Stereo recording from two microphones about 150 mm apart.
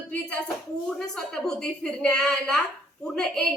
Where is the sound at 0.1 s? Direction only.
10° left (ahead or behind).